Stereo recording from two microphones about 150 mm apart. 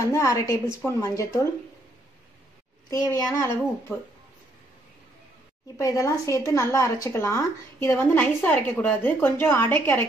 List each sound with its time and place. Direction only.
0.0 s a woman's voice: 20° left (ahead or behind)
2.9 s a woman's voice: 20° left (ahead or behind)
5.8 s a woman's voice: 20° left (ahead or behind)